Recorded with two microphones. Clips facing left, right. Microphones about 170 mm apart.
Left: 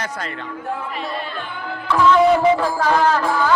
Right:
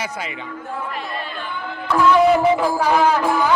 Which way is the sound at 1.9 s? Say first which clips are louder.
Even; 10° right (ahead or behind).